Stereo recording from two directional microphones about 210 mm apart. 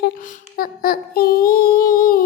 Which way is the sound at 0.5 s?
45° left (ahead or behind).